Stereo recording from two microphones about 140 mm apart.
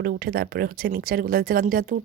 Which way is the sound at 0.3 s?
90° right.